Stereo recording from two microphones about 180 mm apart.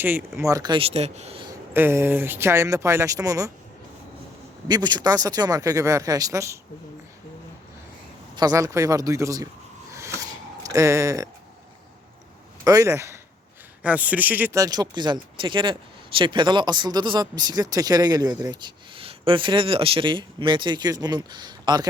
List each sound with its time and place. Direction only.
0.0 s speech: 10° right (ahead or behind); by 1.5 s 35° right (ahead or behind)
1.5 s speech: 15° right (ahead or behind)
4.7 s speech: 20° right (ahead or behind)
8.4 s speech: 20° right (ahead or behind)
9.9 s a sound: 15° right (ahead or behind)
12.6 s speech: 20° right (ahead or behind)